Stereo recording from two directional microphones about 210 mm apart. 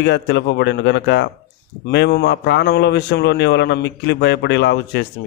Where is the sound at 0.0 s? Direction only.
55° left (ahead or behind).